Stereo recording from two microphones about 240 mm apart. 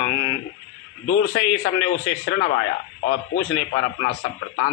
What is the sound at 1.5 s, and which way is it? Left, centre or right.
Speech, left.